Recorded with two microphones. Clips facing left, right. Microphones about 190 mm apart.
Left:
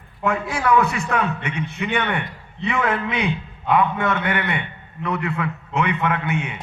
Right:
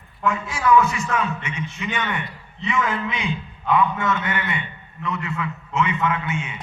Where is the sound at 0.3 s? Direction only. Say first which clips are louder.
Even; 60° left (ahead or behind).